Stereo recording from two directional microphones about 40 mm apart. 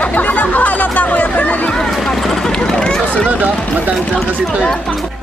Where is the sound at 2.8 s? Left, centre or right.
Centre.